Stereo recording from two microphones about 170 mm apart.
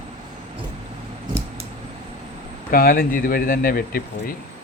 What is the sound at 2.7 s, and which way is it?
Speech, 60° left (ahead or behind).